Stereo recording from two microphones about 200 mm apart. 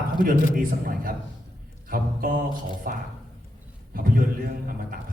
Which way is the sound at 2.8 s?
45° right (ahead or behind).